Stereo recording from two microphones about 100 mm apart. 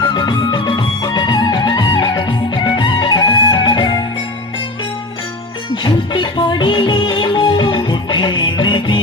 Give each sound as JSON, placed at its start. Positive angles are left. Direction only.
{"t": 0.1, "sound": "music", "side_deg": 50}
{"t": 5.8, "sound": "music", "side_deg": 50}